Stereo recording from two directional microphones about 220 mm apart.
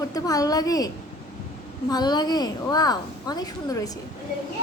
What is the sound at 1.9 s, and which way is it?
A woman's voice, 20° left (ahead or behind).